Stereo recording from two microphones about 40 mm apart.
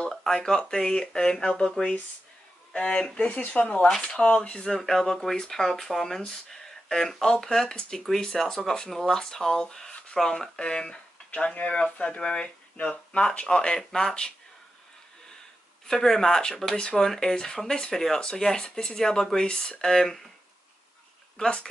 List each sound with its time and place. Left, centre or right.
0.1 s a sound: centre
0.4 s speech: centre
3.3 s speech: left
3.6 s speech: left
3.9 s speech: centre
4.2 s speech: left
11.2 s speech: left; by 14.1 s centre
15.9 s speech: centre